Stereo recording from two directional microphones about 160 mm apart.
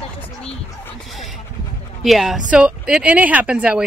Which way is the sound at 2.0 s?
Centre (ahead or behind).